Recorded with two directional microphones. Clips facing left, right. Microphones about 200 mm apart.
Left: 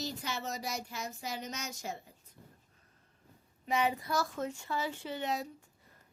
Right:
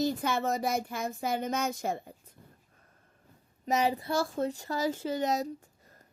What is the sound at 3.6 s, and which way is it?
Speech, 40° right (ahead or behind).